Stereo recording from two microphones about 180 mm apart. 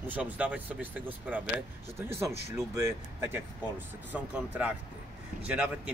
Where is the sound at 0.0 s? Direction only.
10° right (ahead or behind).